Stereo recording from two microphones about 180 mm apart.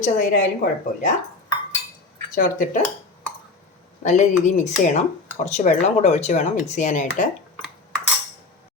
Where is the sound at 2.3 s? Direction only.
50° left (ahead or behind).